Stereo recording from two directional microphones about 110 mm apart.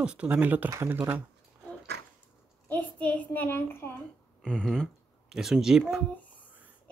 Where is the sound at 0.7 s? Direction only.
25° right (ahead or behind).